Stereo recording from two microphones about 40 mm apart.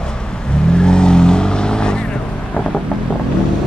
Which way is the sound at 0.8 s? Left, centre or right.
Centre.